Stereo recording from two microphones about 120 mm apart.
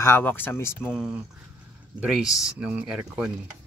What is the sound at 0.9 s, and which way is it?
Speech, 5° right (ahead or behind).